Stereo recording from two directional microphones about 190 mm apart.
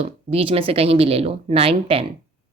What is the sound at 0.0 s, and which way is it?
A woman's voice, 30° right (ahead or behind).